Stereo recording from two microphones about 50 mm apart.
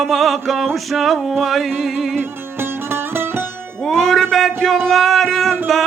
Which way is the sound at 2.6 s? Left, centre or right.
Right.